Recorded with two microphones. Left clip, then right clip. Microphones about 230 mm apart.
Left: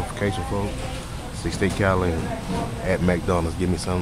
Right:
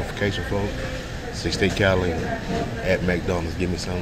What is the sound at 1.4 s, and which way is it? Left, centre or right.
Speech, centre.